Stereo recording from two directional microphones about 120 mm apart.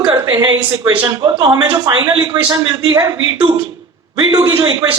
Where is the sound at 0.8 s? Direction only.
35° right (ahead or behind).